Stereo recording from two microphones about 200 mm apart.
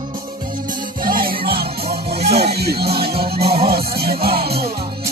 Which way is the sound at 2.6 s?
50° right (ahead or behind).